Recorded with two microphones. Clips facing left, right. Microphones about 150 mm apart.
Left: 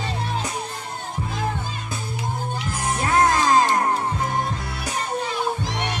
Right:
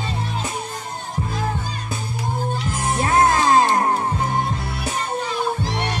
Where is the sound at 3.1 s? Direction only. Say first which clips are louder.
Right 2 dB; 25° right (ahead or behind).